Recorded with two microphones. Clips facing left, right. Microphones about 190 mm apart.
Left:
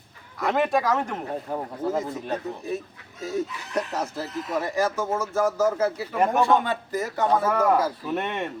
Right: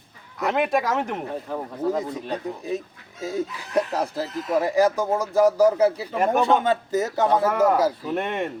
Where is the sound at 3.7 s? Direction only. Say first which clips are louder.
Right 6 dB; 35° right (ahead or behind).